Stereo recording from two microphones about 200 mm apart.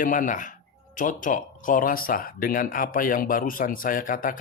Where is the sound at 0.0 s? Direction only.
40° left (ahead or behind).